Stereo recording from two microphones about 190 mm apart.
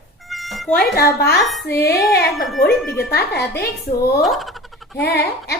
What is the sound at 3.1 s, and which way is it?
A woman's voice, 55° left (ahead or behind).